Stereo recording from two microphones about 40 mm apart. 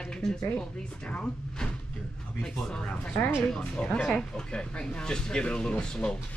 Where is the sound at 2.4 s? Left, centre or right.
Left.